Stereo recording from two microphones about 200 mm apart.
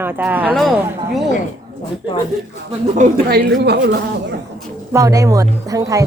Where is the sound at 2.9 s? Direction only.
50° right (ahead or behind).